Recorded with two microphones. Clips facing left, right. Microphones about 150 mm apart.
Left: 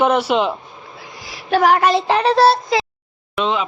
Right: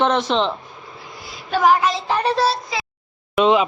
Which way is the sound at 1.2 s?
80° left.